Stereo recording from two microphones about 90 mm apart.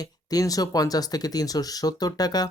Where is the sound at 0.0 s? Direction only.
45° left (ahead or behind).